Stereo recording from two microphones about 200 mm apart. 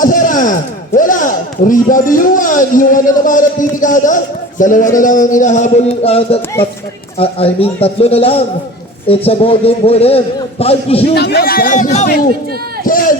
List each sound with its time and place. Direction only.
0.0 s a sound: 40° left (ahead or behind)
0.9 s a man's voice: 40° left (ahead or behind)
11.1 s a man's voice: 55° left (ahead or behind); by 12.1 s 35° left (ahead or behind)
12.8 s run: 45° left (ahead or behind)